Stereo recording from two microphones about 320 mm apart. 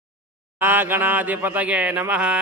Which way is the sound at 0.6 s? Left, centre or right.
Centre.